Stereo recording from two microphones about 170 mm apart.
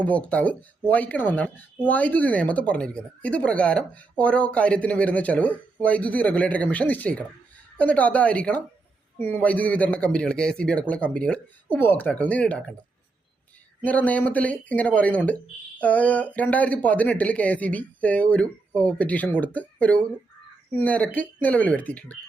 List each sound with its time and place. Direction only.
0.0 s speech: 5° left (ahead or behind)
13.8 s speech: 10° left (ahead or behind)